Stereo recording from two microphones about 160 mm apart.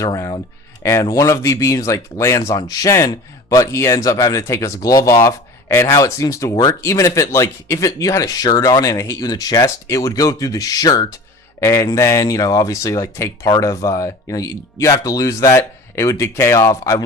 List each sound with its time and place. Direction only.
0.0 s speech: 20° left (ahead or behind)